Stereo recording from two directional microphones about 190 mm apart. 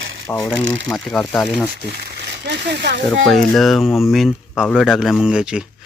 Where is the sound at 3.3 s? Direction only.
Centre (ahead or behind).